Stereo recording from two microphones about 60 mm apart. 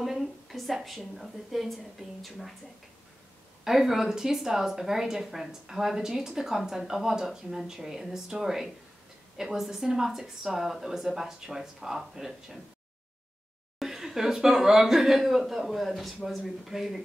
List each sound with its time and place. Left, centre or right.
0.0 s a sound: centre
0.8 s a woman's voice: centre
3.6 s a woman's voice: centre
13.7 s a woman's voice: centre